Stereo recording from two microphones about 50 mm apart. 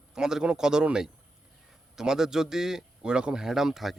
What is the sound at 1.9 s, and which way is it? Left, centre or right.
Speech, centre.